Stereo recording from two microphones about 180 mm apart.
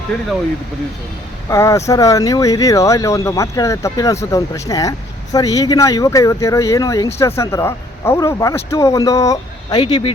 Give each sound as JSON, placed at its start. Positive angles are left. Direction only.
{"t": 1.5, "sound": "speech", "side_deg": 15}